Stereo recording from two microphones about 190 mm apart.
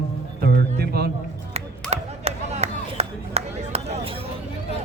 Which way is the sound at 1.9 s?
35° right (ahead or behind).